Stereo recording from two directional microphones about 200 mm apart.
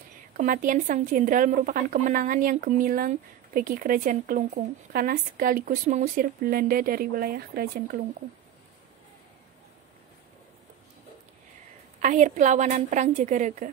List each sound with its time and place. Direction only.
0.4 s speech: 40° right (ahead or behind)
12.0 s a woman's voice: 35° right (ahead or behind)